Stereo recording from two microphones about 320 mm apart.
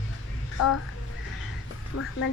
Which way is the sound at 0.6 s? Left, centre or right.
Left.